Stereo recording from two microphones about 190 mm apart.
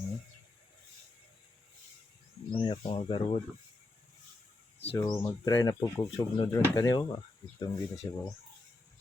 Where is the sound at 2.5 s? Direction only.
25° left (ahead or behind).